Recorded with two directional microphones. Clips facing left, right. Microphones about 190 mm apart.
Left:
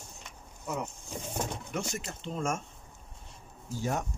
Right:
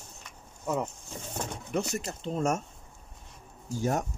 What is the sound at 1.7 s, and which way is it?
Speech, 40° right (ahead or behind).